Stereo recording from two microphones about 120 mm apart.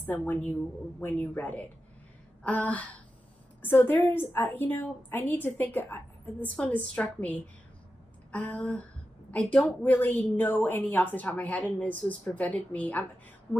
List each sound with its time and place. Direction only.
0.0 s a woman's voice: 15° left (ahead or behind)